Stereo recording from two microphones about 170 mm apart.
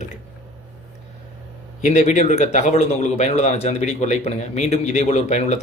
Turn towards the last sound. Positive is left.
turn(degrees=40)  # may be behind; listen again after turning